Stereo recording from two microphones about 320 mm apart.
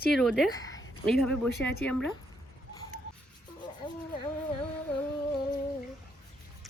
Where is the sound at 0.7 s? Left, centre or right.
Left.